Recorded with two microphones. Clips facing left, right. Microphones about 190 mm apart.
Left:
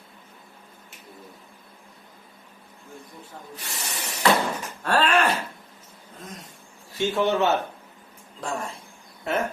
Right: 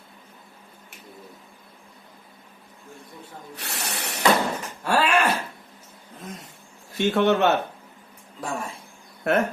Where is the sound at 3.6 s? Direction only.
65° right (ahead or behind).